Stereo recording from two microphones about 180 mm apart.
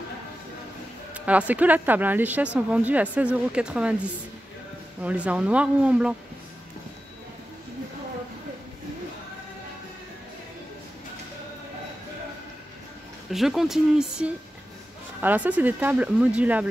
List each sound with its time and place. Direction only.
1.1 s speech: 10° right (ahead or behind)
13.3 s speech: centre (ahead or behind)